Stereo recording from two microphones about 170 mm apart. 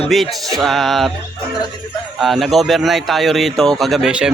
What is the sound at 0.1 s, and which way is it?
Speech, centre (ahead or behind).